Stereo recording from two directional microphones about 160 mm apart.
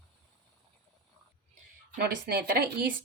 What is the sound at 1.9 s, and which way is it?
Speech, 75° right (ahead or behind).